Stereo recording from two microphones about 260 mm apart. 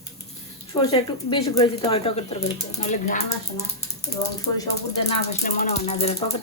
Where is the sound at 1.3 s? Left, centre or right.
Centre.